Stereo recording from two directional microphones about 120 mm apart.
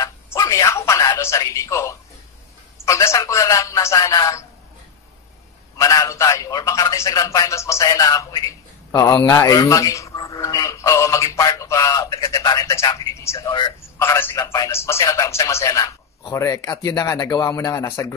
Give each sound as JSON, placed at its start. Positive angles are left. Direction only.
{"t": 0.0, "sound": "a sound", "side_deg": 25}
{"t": 2.8, "sound": "speech", "side_deg": 25}
{"t": 5.8, "sound": "a man's voice", "side_deg": 30}
{"t": 13.5, "sound": "a man's voice", "side_deg": 40}
{"t": 14.0, "sound": "a man's voice", "side_deg": 20}